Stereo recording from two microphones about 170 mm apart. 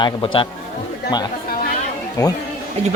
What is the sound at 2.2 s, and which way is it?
Speech, 20° left (ahead or behind).